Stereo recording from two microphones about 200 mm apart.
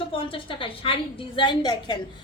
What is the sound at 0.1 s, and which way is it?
A woman's voice, 25° left (ahead or behind).